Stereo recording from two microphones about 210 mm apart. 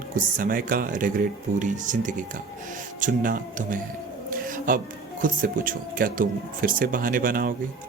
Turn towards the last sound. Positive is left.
turn(degrees=-45)  # may be behind; listen again after turning